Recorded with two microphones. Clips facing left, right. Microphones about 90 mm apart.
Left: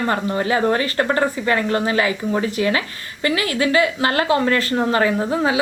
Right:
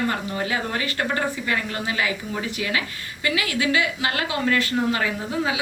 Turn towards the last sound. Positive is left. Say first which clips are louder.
# left 6 dB
turn(degrees=40)  # may be behind; listen again after turning